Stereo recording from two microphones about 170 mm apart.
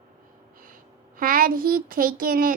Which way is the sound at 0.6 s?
55° right (ahead or behind).